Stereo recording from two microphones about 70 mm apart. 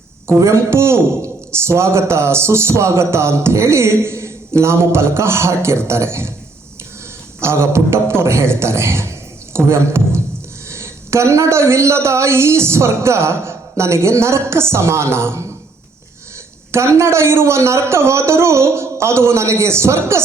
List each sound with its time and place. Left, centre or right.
0.3 s speech: right
7.4 s a man's voice: right
16.7 s speech: right